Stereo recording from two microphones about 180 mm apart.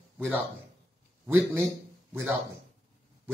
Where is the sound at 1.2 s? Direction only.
10° right (ahead or behind).